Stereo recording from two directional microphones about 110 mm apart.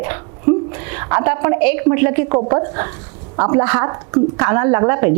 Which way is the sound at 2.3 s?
30° right (ahead or behind).